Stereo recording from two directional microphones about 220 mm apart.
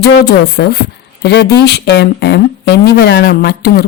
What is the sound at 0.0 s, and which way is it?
A woman's voice, 45° left (ahead or behind).